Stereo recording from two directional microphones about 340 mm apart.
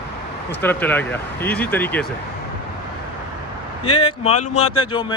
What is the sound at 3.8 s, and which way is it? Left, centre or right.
Speech, left.